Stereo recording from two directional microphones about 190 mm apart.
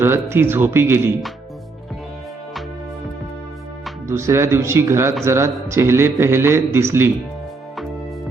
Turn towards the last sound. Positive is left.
turn(degrees=-15)  # may be behind; listen again after turning